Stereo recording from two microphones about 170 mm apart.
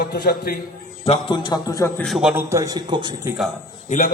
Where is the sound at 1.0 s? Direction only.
30° left (ahead or behind); by 2.0 s 15° left (ahead or behind).